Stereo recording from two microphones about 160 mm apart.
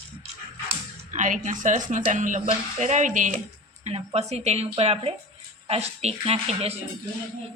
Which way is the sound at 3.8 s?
40° right (ahead or behind).